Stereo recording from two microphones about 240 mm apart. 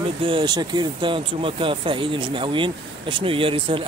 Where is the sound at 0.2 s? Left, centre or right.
Right.